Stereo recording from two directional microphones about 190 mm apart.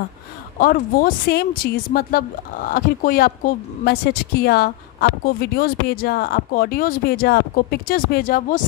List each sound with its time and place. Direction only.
0.6 s speech: 45° left (ahead or behind)